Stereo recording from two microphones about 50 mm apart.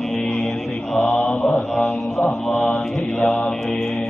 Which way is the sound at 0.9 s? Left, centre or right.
Centre.